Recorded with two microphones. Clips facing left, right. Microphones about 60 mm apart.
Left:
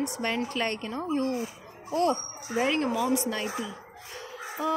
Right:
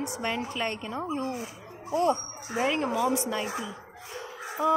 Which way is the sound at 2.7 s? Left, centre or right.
Right.